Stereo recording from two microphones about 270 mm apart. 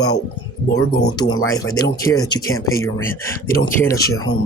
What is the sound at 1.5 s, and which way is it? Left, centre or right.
Speech, centre.